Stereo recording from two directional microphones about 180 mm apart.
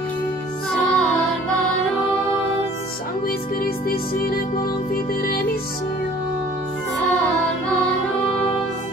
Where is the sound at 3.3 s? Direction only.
55° left (ahead or behind).